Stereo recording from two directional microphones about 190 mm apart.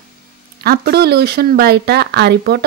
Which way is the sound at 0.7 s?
55° right (ahead or behind).